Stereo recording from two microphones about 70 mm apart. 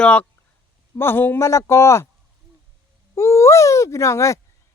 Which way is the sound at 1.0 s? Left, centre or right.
Left.